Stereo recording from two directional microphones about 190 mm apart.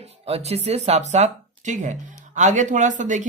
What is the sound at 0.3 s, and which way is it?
A woman's voice, 30° right (ahead or behind).